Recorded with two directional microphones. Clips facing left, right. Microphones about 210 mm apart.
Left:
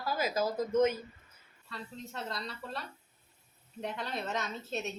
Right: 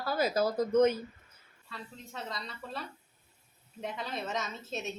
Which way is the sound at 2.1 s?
Centre (ahead or behind).